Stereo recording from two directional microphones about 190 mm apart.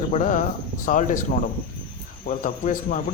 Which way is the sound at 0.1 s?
40° left (ahead or behind).